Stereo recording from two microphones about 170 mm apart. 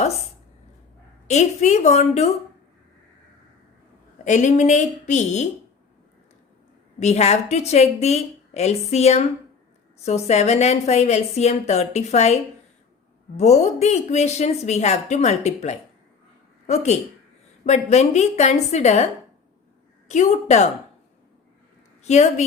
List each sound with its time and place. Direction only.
1.3 s a woman's voice: 40° left (ahead or behind)
4.2 s speech: 45° left (ahead or behind)
7.0 s a woman's voice: 40° left (ahead or behind)
20.1 s speech: 40° left (ahead or behind)
22.0 s a woman's voice: 40° left (ahead or behind)